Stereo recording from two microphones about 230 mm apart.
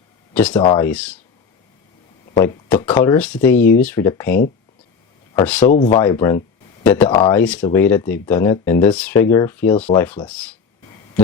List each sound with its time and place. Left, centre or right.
0.3 s speech: centre
0.6 s speech: centre
0.9 s speech: centre
2.3 s speech: centre
5.6 s speech: left
5.9 s speech: centre